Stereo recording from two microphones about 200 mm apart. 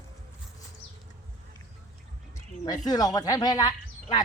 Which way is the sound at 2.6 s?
20° left (ahead or behind).